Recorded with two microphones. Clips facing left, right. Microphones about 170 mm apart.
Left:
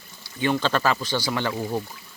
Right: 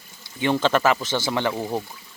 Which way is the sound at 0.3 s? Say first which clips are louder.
Right 3 dB; 20° right (ahead or behind).